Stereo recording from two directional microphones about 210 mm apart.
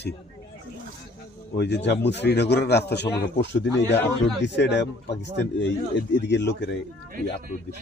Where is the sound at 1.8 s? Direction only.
55° left (ahead or behind).